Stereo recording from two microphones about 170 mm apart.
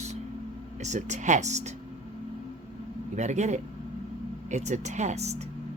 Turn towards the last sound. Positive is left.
turn(degrees=-40)  # may be behind; listen again after turning